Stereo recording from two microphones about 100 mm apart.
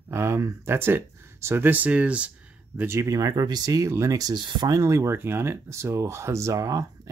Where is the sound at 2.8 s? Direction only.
30° right (ahead or behind).